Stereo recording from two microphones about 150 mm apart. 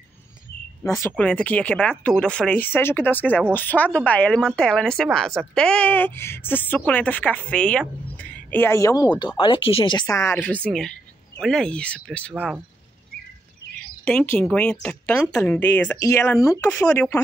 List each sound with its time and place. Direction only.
1.0 s speech: 10° left (ahead or behind)
9.4 s speech: 35° left (ahead or behind)
10.0 s speech: 20° left (ahead or behind)
12.4 s speech: 10° right (ahead or behind)
14.0 s speech: 10° left (ahead or behind)
16.7 s speech: 10° left (ahead or behind)